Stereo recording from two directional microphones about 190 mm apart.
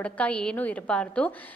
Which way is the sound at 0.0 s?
5° left (ahead or behind).